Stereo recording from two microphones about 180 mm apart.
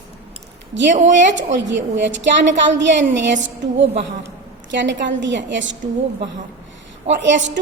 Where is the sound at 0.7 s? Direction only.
80° right.